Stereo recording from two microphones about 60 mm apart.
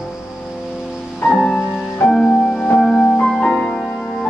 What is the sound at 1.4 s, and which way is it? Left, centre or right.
Music, centre.